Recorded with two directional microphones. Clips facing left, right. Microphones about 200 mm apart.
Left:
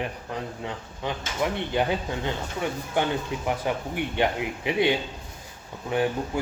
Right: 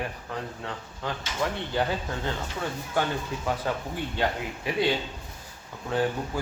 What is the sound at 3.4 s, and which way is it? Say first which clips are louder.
A man's voice: left 1 dB; 15° left (ahead or behind).